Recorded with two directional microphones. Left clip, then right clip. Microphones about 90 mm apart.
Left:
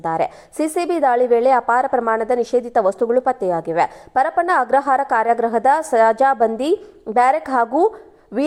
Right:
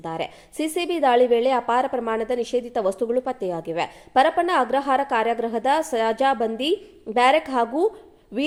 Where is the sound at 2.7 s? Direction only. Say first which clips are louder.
Left 7 dB; 10° left (ahead or behind).